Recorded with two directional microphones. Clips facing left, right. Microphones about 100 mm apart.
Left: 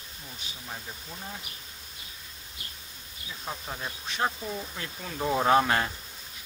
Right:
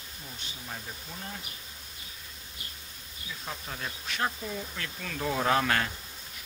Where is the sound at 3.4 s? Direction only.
20° left (ahead or behind).